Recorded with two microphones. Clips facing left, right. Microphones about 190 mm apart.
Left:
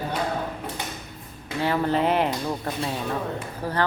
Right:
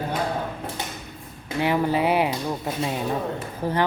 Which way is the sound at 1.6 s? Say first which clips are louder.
Right 1 dB; 15° right (ahead or behind).